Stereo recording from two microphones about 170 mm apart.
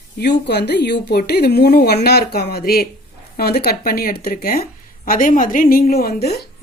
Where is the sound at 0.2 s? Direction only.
75° left (ahead or behind).